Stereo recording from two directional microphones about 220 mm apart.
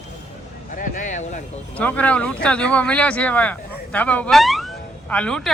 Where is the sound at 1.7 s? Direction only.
5° left (ahead or behind).